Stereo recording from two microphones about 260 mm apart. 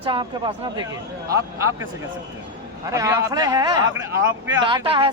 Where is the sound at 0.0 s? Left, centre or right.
Centre.